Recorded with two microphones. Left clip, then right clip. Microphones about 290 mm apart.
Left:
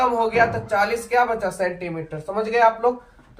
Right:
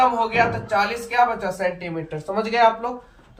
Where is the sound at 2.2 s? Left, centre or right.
Left.